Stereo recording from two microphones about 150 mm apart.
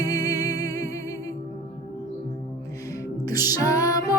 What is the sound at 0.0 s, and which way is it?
Music, 25° left (ahead or behind).